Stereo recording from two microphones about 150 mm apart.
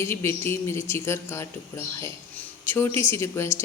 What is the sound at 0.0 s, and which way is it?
Speech, 15° left (ahead or behind).